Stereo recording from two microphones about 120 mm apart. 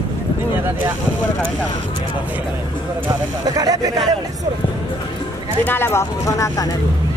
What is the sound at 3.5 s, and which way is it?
Speech, 30° right (ahead or behind).